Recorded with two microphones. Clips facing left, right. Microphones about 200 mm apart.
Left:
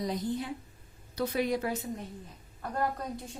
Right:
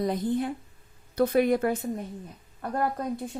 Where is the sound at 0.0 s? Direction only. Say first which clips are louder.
Right 6 dB; 55° right (ahead or behind).